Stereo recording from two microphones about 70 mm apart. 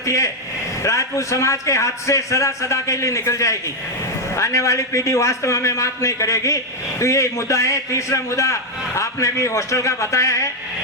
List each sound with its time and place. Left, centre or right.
0.0 s a man's voice: left